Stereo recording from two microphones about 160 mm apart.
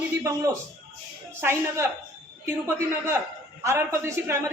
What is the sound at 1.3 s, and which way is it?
Speech, 15° right (ahead or behind).